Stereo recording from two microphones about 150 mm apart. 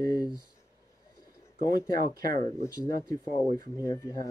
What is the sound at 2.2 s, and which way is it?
Speech, 25° left (ahead or behind).